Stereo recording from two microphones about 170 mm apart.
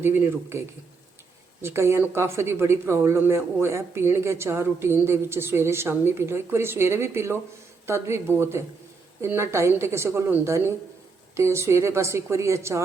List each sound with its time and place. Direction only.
0.0 s speech: 15° right (ahead or behind)
1.6 s speech: 15° right (ahead or behind)